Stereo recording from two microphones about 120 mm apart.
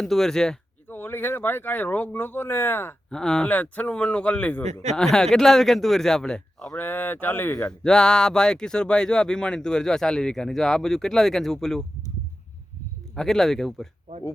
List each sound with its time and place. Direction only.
0.0 s speech: 5° left (ahead or behind)
0.9 s speech: 15° left (ahead or behind)
3.1 s speech: 5° left (ahead or behind)
4.6 s speech: 70° right (ahead or behind)
4.9 s speech: 5° left (ahead or behind)
6.7 s speech: 15° left (ahead or behind)
7.9 s speech: 5° left (ahead or behind)
13.1 s speech: 5° left (ahead or behind)